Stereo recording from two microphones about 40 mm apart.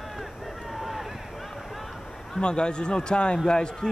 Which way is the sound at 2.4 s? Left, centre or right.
Left.